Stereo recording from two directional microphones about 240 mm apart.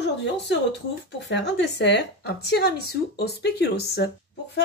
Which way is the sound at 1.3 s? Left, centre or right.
Left.